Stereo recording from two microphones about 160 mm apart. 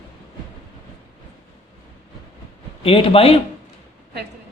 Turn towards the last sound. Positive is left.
turn(degrees=35)  # may be behind; listen again after turning